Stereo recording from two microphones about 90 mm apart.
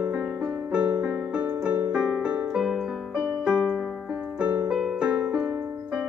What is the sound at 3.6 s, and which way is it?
Piano, centre (ahead or behind).